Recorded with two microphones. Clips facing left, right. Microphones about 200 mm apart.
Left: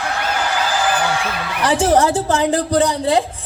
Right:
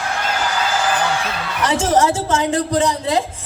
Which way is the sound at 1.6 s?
35° left (ahead or behind).